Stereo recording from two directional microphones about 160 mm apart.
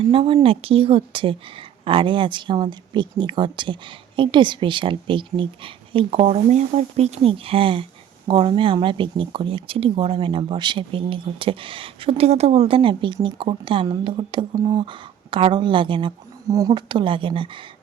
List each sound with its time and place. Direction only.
0.0 s speech: 35° right (ahead or behind)